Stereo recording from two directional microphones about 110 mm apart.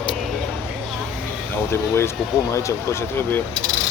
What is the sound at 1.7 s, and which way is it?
Speech, 25° left (ahead or behind).